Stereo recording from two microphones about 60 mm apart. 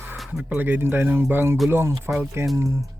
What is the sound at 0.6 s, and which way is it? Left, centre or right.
Speech, right.